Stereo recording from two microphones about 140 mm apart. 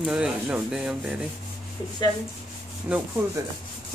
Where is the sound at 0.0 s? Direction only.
5° right (ahead or behind).